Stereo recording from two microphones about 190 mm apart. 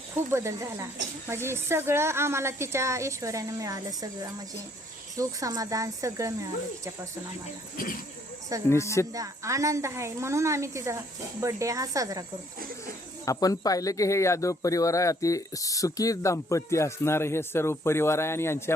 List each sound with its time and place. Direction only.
0.3 s a woman's voice: 15° right (ahead or behind)
8.7 s speech: 15° left (ahead or behind)
9.1 s a woman's voice: 15° right (ahead or behind)
13.2 s speech: 15° left (ahead or behind)